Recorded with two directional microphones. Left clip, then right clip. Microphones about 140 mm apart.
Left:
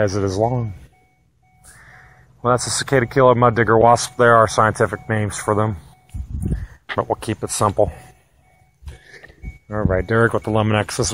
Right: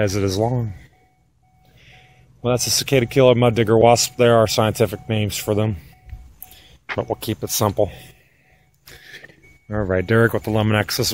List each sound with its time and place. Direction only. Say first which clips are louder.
0.0 s speech: left 2 dB; 30° right (ahead or behind)
2.4 s speech: left 2 dB; 30° right (ahead or behind)
2.9 s speech: left 1 dB; 90° right
3.6 s speech: right 1 dB; 35° right (ahead or behind)
4.9 s speech: left 1 dB; 40° right (ahead or behind)
7.0 s speech: left 3 dB; 10° right (ahead or behind)
9.7 s speech: left 1 dB; 60° right (ahead or behind)
10.0 s speech: even; 45° right (ahead or behind)
10.3 s speech: left 1 dB; 10° right (ahead or behind)